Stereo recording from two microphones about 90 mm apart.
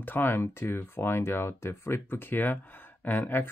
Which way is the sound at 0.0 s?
25° left (ahead or behind).